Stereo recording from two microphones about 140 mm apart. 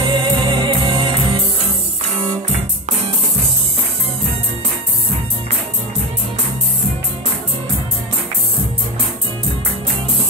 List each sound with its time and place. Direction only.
0.0 s music: 35° right (ahead or behind)